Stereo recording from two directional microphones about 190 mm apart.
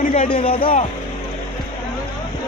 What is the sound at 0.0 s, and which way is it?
Music, 45° left (ahead or behind).